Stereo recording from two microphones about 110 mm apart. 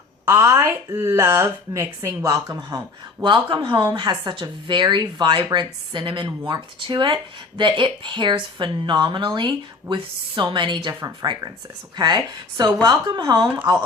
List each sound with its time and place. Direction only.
0.3 s a woman's voice: 25° right (ahead or behind); by 10.9 s 45° right (ahead or behind)
11.0 s speech: 35° right (ahead or behind)